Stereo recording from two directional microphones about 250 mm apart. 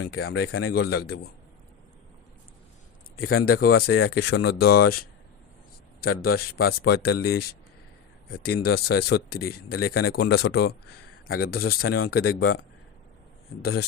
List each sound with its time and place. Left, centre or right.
0.0 s speech: left
0.3 s speech: left
3.2 s speech: left
6.0 s speech: left
13.6 s speech: left